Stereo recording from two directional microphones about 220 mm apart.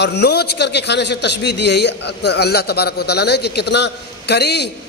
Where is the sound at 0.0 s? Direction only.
50° left (ahead or behind).